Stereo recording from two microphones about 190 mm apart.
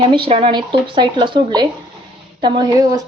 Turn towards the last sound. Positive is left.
turn(degrees=-20)  # may be behind; listen again after turning